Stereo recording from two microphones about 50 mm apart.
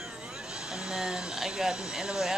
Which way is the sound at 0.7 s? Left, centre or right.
Centre.